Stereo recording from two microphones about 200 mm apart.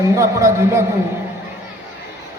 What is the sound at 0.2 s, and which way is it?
Speech, 15° right (ahead or behind).